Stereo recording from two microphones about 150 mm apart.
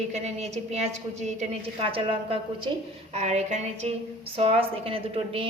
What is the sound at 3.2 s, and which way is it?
A woman's voice, 50° right (ahead or behind).